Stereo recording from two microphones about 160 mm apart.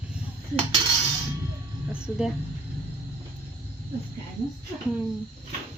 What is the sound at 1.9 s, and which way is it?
Speech, 5° right (ahead or behind).